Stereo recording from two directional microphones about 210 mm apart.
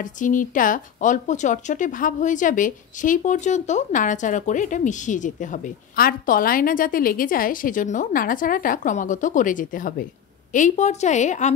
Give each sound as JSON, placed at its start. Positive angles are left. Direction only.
{"t": 0.0, "sound": "speech", "side_deg": 40}